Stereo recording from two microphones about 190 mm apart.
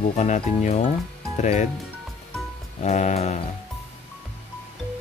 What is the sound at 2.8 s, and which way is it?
Speech, 35° left (ahead or behind).